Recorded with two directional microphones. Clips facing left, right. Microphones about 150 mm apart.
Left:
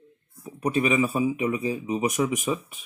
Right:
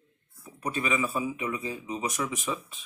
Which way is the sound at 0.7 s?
15° left (ahead or behind).